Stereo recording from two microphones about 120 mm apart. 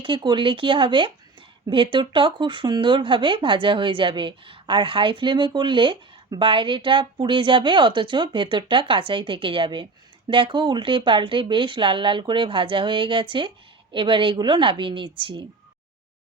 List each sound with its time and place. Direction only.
0.0 s speech: 40° right (ahead or behind)